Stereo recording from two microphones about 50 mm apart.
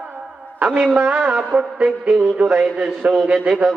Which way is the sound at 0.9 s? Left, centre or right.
Right.